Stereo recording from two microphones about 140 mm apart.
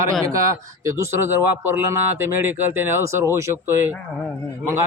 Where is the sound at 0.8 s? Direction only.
20° right (ahead or behind).